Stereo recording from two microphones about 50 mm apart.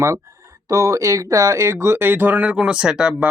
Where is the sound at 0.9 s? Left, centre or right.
Right.